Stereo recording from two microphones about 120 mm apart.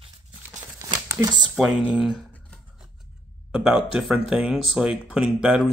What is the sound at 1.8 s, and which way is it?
Speech, 10° right (ahead or behind).